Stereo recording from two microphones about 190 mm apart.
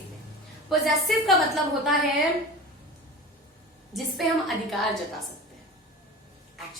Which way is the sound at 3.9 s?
Centre (ahead or behind).